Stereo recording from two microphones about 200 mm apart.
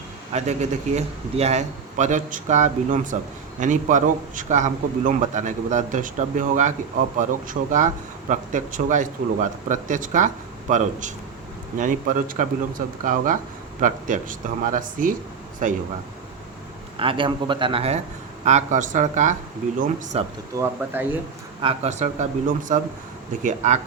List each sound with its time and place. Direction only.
0.3 s a man's voice: 35° right (ahead or behind)
17.0 s a man's voice: 25° right (ahead or behind)
20.6 s speech: 10° right (ahead or behind)
21.6 s a man's voice: 30° right (ahead or behind)
23.4 s a man's voice: 35° right (ahead or behind)